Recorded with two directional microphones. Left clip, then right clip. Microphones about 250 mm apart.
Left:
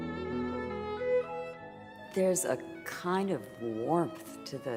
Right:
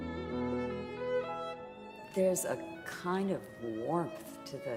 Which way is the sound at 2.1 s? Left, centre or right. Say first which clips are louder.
Left 2 dB; left.